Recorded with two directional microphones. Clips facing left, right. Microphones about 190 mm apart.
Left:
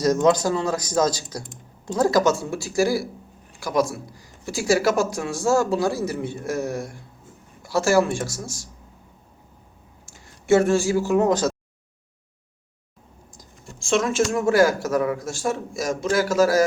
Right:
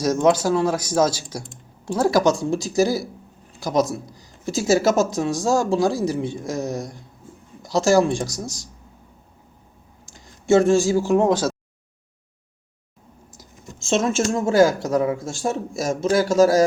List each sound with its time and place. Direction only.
0.0 s speech: 10° right (ahead or behind)
10.6 s speech: 15° right (ahead or behind)
13.9 s speech: 25° right (ahead or behind)